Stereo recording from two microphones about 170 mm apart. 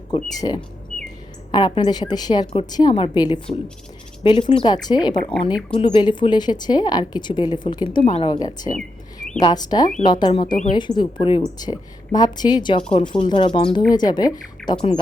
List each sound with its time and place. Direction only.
0.1 s speech: 25° left (ahead or behind)
10.5 s speech: 50° left (ahead or behind)
10.8 s speech: 25° left (ahead or behind)